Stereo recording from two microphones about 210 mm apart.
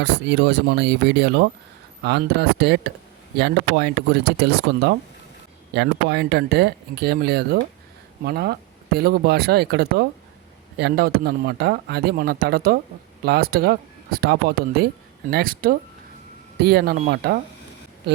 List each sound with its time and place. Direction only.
0.0 s speech: 55° right (ahead or behind)